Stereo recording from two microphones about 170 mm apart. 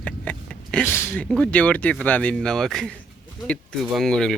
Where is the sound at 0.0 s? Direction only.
5° left (ahead or behind).